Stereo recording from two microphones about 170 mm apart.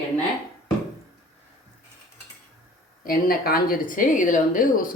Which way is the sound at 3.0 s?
60° left (ahead or behind).